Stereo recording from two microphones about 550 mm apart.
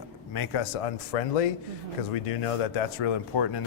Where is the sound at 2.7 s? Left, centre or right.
Left.